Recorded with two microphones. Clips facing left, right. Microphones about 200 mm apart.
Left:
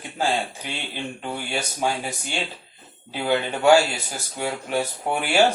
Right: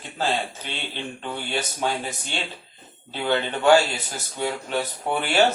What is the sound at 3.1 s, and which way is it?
Speech, 10° left (ahead or behind).